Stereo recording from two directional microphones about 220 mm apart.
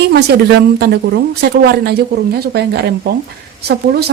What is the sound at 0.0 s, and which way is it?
A woman's voice, 50° right (ahead or behind).